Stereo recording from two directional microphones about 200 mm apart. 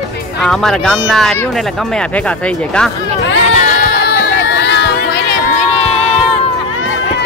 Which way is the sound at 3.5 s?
40° left (ahead or behind).